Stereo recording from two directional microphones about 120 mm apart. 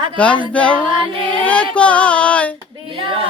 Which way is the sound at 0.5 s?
10° left (ahead or behind).